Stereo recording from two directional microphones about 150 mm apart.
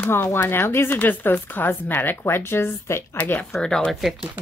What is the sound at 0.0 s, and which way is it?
Speech, 15° left (ahead or behind).